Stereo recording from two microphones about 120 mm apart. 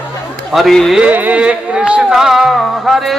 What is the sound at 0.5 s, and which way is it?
Speech, centre (ahead or behind).